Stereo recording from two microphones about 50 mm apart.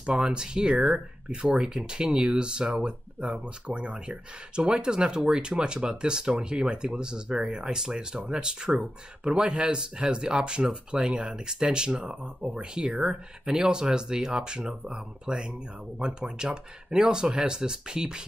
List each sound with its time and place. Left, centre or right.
0.0 s speech: centre